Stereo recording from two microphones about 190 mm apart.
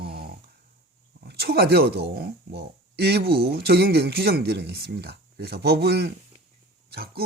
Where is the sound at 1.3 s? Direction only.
60° right (ahead or behind).